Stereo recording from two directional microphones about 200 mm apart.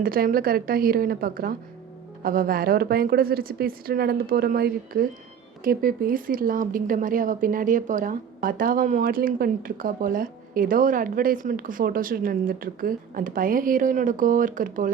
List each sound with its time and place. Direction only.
0.0 s speech: 45° right (ahead or behind)